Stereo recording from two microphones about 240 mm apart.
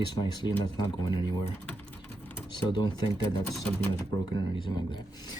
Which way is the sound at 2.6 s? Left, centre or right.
Centre.